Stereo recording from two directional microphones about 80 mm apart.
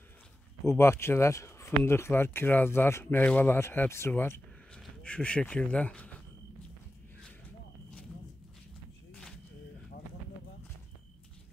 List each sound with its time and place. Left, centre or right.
0.7 s speech: left
3.5 s speech: left
4.1 s speech: centre